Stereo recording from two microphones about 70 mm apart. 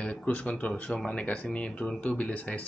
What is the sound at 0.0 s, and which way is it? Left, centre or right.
Speech, centre.